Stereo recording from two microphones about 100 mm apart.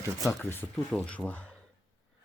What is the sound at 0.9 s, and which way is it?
Speech, 10° left (ahead or behind).